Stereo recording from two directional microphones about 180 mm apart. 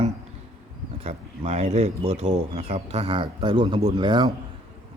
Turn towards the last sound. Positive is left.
turn(degrees=-25)  # may be behind; listen again after turning